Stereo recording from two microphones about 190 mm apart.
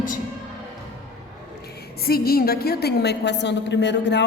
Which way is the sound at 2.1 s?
55° left (ahead or behind).